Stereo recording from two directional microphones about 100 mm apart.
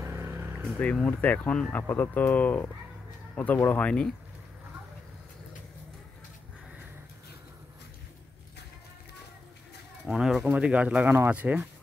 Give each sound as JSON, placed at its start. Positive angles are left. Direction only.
{"t": 0.0, "sound": "vehicle", "side_deg": -20}
{"t": 0.7, "sound": "speech", "side_deg": 15}
{"t": 10.0, "sound": "speech", "side_deg": -5}